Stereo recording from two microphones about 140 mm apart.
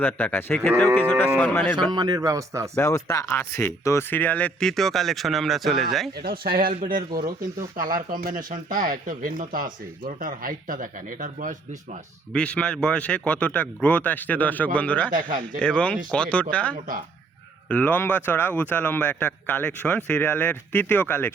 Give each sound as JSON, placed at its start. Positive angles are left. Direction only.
{"t": 0.0, "sound": "a man's voice", "side_deg": 15}
{"t": 1.9, "sound": "a man's voice", "side_deg": -30}
{"t": 2.7, "sound": "speech", "side_deg": 20}
{"t": 6.2, "sound": "speech", "side_deg": -90}
{"t": 7.1, "sound": "speech", "side_deg": -30}
{"t": 7.8, "sound": "speech", "side_deg": -80}
{"t": 12.3, "sound": "a man's voice", "side_deg": 10}